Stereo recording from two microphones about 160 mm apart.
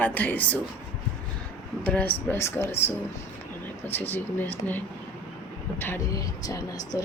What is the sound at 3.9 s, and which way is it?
A woman's voice, 10° left (ahead or behind).